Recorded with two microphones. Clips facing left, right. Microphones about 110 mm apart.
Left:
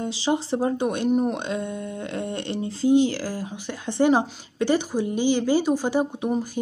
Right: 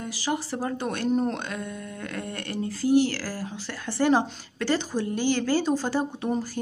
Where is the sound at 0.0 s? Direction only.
25° left (ahead or behind).